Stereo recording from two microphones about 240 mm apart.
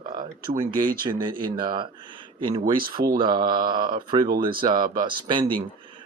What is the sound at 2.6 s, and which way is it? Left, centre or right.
Speech, right.